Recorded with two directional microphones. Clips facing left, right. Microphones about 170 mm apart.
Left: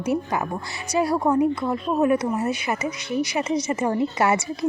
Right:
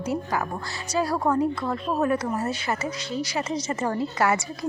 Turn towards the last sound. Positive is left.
turn(degrees=20)  # may be behind; listen again after turning